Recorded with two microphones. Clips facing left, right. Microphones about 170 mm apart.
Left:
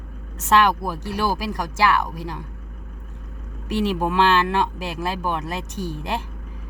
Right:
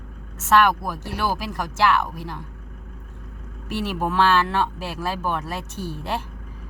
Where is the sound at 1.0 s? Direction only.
15° left (ahead or behind).